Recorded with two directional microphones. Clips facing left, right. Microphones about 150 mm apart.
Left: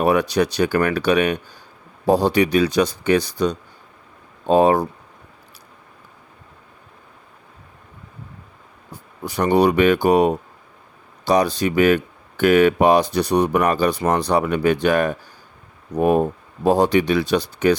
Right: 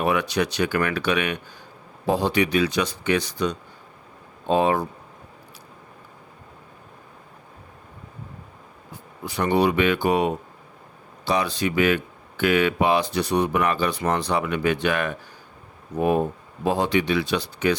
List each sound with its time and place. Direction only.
0.0 s speech: 35° left (ahead or behind)
9.2 s speech: 40° left (ahead or behind)